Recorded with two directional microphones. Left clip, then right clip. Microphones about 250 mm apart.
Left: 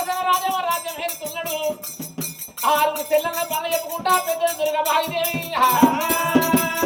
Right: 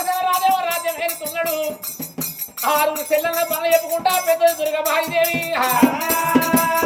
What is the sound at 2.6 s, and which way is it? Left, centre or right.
Music, centre.